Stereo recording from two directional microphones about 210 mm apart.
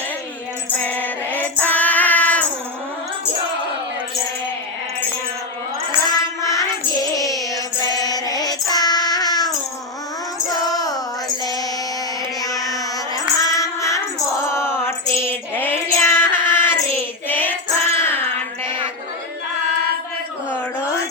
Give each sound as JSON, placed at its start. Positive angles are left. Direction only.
{"t": 0.8, "sound": "music", "side_deg": 10}
{"t": 6.5, "sound": "music", "side_deg": 15}
{"t": 10.5, "sound": "child singing", "side_deg": 15}
{"t": 12.4, "sound": "child singing", "side_deg": 15}
{"t": 14.4, "sound": "a sound", "side_deg": 10}